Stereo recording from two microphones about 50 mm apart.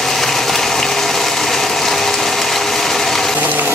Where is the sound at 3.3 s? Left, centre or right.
Right.